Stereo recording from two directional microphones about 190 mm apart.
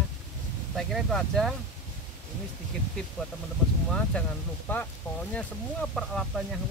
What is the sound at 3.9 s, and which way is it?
Speech, 5° left (ahead or behind).